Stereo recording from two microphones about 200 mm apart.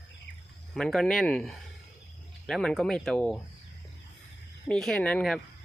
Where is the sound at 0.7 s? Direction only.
Centre (ahead or behind).